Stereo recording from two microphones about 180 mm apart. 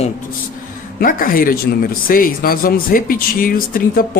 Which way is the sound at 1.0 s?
50° left (ahead or behind).